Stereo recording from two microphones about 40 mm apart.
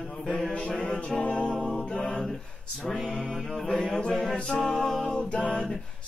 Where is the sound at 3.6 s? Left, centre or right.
Left.